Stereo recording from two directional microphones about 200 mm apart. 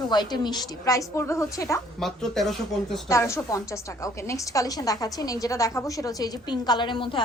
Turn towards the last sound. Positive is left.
turn(degrees=25)  # may be behind; listen again after turning